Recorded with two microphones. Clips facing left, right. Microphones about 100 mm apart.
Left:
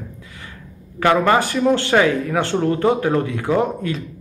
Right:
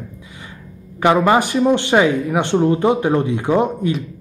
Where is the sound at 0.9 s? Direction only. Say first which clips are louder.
Right 2 dB; 20° right (ahead or behind).